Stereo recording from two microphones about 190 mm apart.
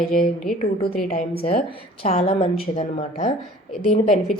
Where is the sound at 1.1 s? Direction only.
35° left (ahead or behind).